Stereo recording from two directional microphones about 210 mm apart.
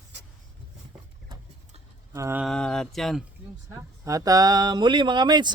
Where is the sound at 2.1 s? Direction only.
10° right (ahead or behind).